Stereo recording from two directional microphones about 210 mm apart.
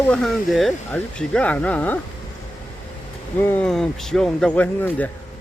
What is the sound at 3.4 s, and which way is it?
Speech, 10° left (ahead or behind).